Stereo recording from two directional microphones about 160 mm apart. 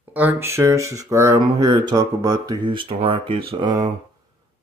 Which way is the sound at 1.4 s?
30° right (ahead or behind).